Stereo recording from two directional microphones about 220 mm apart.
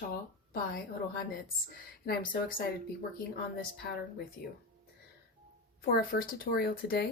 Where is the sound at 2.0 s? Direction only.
40° left (ahead or behind).